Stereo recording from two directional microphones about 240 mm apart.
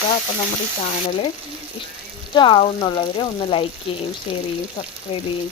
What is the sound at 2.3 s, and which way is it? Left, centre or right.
Speech, centre.